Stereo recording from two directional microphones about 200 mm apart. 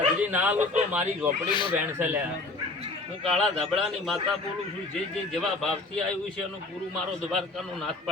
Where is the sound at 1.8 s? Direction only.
10° right (ahead or behind).